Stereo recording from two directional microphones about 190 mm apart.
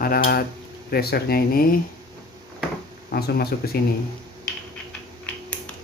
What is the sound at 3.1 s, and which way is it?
Speech, 55° left (ahead or behind).